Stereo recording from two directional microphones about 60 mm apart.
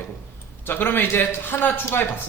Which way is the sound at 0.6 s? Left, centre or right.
Left.